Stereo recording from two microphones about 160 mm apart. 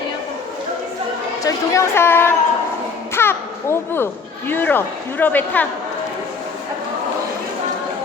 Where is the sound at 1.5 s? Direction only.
15° left (ahead or behind).